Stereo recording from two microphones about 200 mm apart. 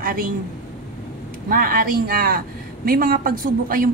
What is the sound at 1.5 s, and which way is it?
A woman's voice, 45° right (ahead or behind).